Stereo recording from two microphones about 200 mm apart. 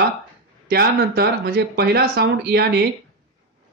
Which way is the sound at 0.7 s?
50° right (ahead or behind).